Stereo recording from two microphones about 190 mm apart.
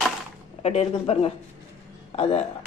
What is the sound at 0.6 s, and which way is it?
Speech, 35° left (ahead or behind).